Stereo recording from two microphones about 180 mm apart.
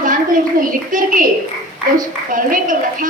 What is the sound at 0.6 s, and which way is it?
Speech, 50° right (ahead or behind).